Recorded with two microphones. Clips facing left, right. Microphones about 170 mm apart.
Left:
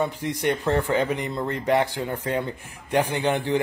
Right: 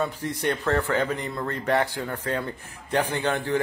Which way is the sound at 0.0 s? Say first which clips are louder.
Left 2 dB; 15° left (ahead or behind).